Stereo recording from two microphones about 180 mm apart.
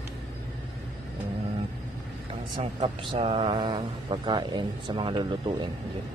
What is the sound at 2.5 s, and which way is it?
Speech, 30° right (ahead or behind).